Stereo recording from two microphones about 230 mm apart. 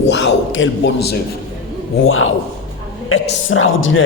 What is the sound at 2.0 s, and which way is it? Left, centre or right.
A man's voice, left.